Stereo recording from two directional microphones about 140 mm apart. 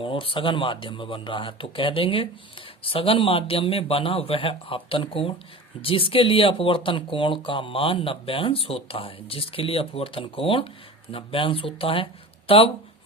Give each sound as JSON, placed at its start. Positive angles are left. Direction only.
{"t": 0.0, "sound": "speech", "side_deg": 40}